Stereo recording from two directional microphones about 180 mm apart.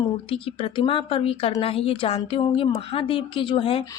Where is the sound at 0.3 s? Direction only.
30° left (ahead or behind).